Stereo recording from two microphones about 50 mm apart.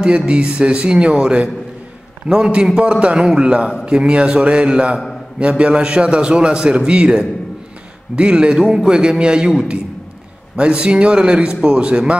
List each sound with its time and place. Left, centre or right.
0.3 s a man's voice: right
10.5 s speech: right